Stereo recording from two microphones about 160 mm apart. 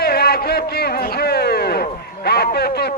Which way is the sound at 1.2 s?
90° left.